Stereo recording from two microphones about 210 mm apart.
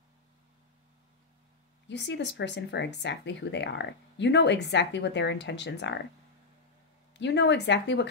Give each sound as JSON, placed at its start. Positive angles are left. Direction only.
{"t": 1.9, "sound": "speech", "side_deg": 55}
{"t": 7.2, "sound": "speech", "side_deg": 55}